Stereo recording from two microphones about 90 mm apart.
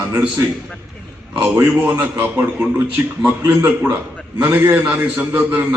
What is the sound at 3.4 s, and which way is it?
A man's voice, 25° right (ahead or behind).